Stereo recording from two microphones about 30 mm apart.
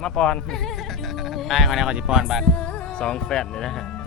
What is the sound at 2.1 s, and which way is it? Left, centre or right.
Speech, centre.